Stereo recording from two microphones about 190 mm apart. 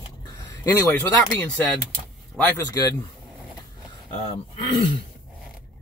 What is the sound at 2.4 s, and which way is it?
Speech, 15° left (ahead or behind).